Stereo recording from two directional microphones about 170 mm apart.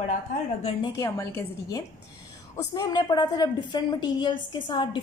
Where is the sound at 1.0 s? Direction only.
20° left (ahead or behind).